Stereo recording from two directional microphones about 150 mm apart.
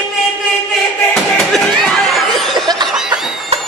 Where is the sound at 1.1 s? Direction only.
Centre (ahead or behind).